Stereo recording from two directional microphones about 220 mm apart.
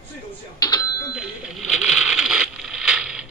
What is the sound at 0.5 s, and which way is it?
Doorbell, 15° left (ahead or behind).